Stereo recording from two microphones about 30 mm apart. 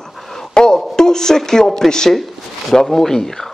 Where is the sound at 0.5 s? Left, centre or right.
Left.